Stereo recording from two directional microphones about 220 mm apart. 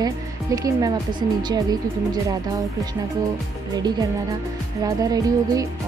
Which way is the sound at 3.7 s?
20° right (ahead or behind).